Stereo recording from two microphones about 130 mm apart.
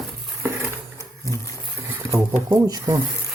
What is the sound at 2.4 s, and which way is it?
Speech, 30° right (ahead or behind).